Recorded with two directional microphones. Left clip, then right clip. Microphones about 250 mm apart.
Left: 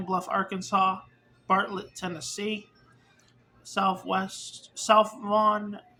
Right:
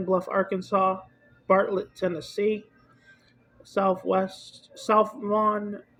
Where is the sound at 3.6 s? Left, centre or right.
Centre.